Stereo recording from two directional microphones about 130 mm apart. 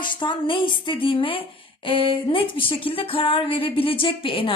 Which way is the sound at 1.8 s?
40° left (ahead or behind).